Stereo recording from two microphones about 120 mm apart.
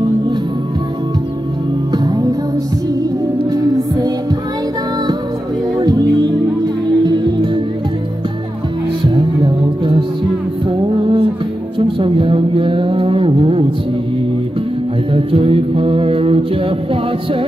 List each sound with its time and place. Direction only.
1.9 s music: 35° right (ahead or behind)
5.8 s music: 35° right (ahead or behind)
9.0 s music: 40° right (ahead or behind)
11.8 s a sound: 45° right (ahead or behind)
15.1 s mantra: 50° right (ahead or behind)